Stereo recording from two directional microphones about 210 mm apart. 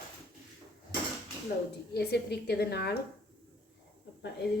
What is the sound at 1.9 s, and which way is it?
Speech, 50° left (ahead or behind).